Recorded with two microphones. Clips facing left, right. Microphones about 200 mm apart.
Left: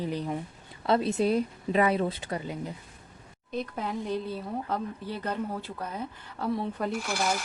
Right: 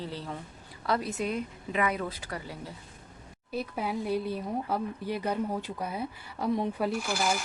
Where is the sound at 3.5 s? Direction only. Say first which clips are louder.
Even; 10° right (ahead or behind).